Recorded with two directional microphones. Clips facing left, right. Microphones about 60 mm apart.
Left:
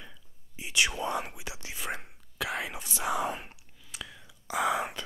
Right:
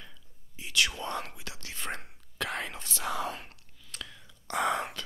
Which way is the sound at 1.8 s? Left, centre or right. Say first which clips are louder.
Even; centre.